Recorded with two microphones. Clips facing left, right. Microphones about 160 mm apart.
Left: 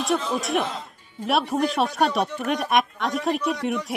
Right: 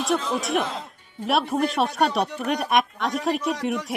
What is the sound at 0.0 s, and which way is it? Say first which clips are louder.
Speech: even; centre (ahead or behind).